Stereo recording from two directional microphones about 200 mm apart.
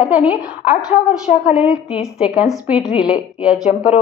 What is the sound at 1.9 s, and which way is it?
A woman's voice, 5° right (ahead or behind).